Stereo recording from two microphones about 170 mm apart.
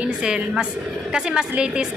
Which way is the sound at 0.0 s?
5° right (ahead or behind).